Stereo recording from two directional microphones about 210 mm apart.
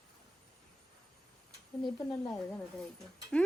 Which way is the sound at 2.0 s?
15° left (ahead or behind).